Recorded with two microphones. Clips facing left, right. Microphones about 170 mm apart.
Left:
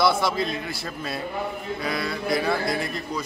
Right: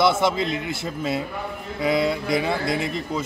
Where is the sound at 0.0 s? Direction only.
20° right (ahead or behind).